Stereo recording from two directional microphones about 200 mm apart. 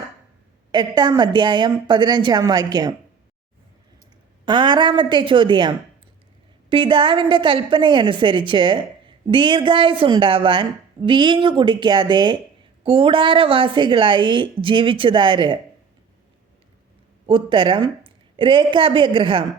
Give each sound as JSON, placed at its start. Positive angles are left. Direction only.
{"t": 0.7, "sound": "a woman's voice", "side_deg": -20}
{"t": 4.4, "sound": "a woman's voice", "side_deg": -25}
{"t": 17.2, "sound": "a woman's voice", "side_deg": -25}